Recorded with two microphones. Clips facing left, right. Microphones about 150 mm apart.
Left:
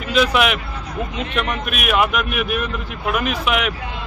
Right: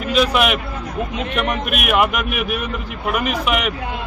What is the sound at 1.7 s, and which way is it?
Speech, 55° right (ahead or behind).